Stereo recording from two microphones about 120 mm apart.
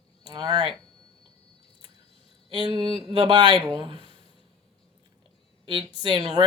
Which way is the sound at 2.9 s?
45° right (ahead or behind).